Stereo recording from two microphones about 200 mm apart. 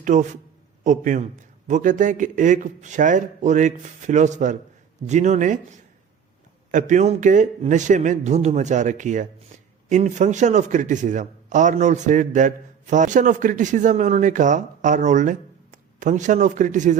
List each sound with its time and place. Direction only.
0.0 s a man's voice: 40° right (ahead or behind)
6.7 s a man's voice: 40° right (ahead or behind)